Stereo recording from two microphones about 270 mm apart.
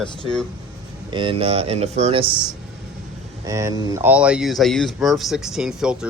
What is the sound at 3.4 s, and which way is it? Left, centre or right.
Speech, centre.